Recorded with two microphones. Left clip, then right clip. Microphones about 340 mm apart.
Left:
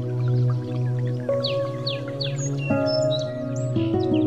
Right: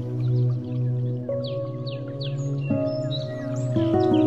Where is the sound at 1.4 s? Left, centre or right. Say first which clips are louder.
Left 5 dB; left.